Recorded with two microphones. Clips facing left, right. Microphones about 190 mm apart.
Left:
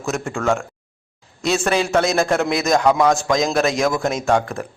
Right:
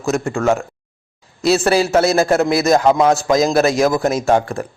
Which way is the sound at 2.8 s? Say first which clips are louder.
Right 2 dB; 25° right (ahead or behind).